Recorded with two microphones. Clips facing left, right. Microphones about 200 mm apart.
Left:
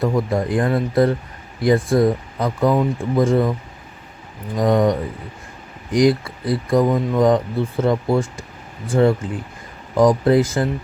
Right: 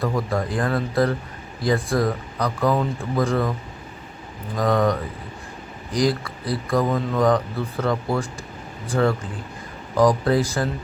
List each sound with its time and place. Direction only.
0.0 s speech: 20° left (ahead or behind)
4.5 s speech: 20° left (ahead or behind)